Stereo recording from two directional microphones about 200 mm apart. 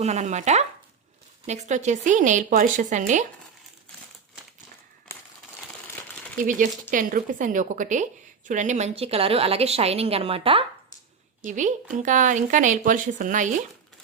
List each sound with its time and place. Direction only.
0.0 s speech: 35° right (ahead or behind)
6.3 s a woman's voice: 40° right (ahead or behind)
11.4 s speech: 40° right (ahead or behind)